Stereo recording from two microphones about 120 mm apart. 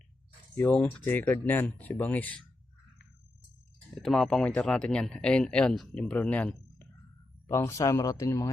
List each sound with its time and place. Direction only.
0.5 s speech: 15° left (ahead or behind)
4.0 s speech: 5° left (ahead or behind)
7.4 s speech: 25° left (ahead or behind)